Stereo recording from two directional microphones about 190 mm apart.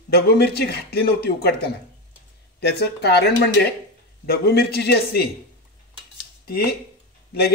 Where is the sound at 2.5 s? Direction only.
60° left (ahead or behind).